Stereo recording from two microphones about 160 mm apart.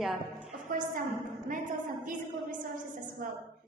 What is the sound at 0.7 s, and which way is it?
Speech, 60° right (ahead or behind).